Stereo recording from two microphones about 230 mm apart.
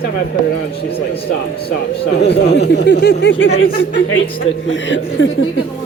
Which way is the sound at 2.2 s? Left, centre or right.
Left.